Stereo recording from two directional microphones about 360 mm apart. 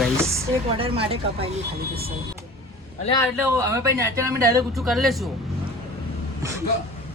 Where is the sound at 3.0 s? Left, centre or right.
Centre.